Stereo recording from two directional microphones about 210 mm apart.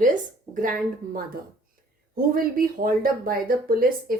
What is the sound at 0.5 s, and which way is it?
Speech, 40° right (ahead or behind).